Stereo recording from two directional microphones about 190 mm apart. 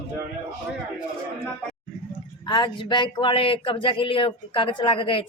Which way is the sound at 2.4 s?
25° left (ahead or behind).